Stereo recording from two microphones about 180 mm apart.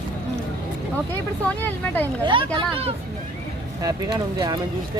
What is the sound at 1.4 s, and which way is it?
Speech, 10° left (ahead or behind).